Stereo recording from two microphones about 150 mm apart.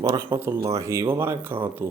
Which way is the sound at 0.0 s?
20° right (ahead or behind).